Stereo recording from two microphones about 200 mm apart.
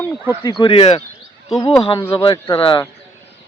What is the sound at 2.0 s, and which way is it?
Speech, 20° left (ahead or behind).